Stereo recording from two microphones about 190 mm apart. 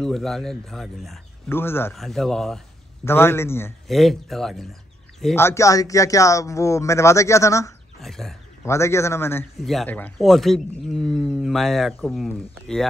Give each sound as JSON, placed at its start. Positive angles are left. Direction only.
{"t": 0.0, "sound": "speech", "side_deg": 0}
{"t": 1.5, "sound": "speech", "side_deg": 10}
{"t": 2.0, "sound": "speech", "side_deg": 0}
{"t": 3.8, "sound": "speech", "side_deg": 0}
{"t": 5.3, "sound": "speech", "side_deg": 15}
{"t": 8.0, "sound": "speech", "side_deg": 0}
{"t": 8.6, "sound": "speech", "side_deg": 15}
{"t": 9.6, "sound": "speech", "side_deg": 0}